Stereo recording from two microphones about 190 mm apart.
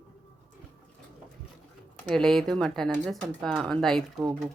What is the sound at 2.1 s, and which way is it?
Speech, 5° left (ahead or behind).